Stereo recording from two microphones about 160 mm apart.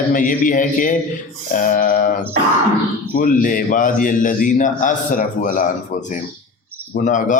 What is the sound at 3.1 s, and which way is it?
A man's voice, 60° left (ahead or behind).